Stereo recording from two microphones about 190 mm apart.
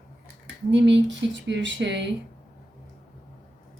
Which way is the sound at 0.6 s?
70° right (ahead or behind).